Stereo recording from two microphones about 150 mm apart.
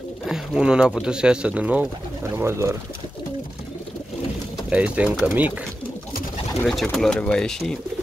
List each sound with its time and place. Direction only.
0.3 s speech: 5° right (ahead or behind)
4.6 s speech: 10° right (ahead or behind)
6.6 s speech: centre (ahead or behind)